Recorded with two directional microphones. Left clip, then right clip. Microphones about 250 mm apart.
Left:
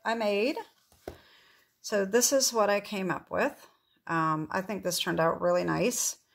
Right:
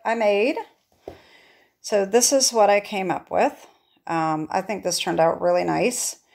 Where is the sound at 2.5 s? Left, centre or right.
Left.